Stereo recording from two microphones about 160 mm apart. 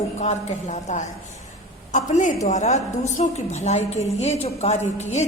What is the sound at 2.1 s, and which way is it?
A woman's voice, 50° left (ahead or behind).